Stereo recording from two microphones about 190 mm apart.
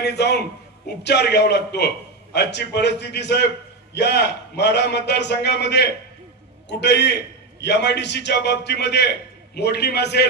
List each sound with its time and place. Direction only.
0.0 s a man's voice: 60° left (ahead or behind)